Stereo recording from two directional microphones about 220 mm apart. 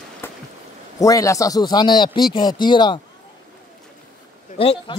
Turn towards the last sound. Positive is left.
turn(degrees=25)  # may be behind; listen again after turning